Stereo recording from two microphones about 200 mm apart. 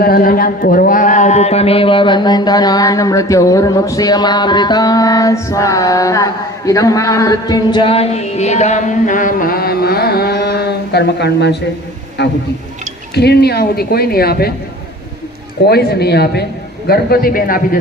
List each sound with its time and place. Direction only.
0.0 s a man's voice: 45° left (ahead or behind)
15.6 s a man's voice: 50° left (ahead or behind)